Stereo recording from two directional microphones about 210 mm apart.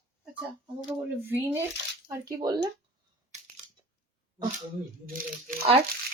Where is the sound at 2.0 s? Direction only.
20° right (ahead or behind).